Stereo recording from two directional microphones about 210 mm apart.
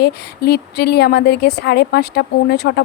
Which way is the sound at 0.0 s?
50° left (ahead or behind).